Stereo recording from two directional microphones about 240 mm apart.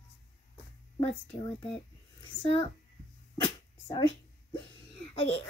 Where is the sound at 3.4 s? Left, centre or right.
Centre.